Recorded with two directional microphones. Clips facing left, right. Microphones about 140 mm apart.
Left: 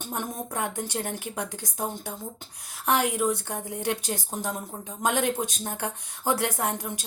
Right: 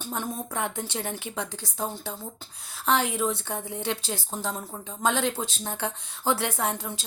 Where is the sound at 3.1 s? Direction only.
15° left (ahead or behind).